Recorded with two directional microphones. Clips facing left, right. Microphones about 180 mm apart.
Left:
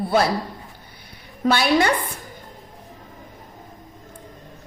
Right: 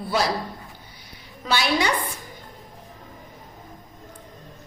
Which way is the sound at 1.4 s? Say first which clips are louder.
Left 5 dB; 55° left (ahead or behind).